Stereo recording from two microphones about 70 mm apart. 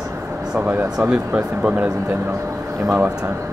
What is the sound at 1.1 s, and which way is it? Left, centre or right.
Speech, centre.